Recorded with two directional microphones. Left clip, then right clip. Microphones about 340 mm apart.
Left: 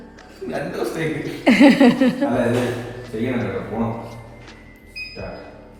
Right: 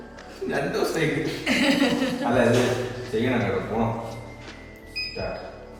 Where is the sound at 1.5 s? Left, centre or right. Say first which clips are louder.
Left 9 dB; centre.